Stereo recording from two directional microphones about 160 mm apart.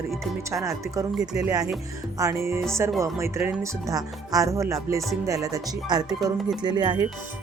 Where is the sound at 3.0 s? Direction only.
15° right (ahead or behind).